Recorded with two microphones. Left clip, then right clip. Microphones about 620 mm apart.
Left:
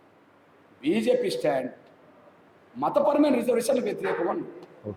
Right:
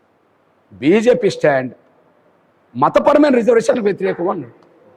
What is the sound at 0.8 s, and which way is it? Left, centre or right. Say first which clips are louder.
Speech: right 11 dB; right.